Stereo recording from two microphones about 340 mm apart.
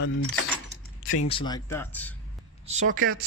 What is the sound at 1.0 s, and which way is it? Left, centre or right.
Typing, left.